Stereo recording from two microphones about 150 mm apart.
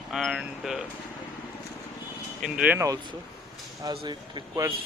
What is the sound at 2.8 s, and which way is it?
Speech, 25° right (ahead or behind).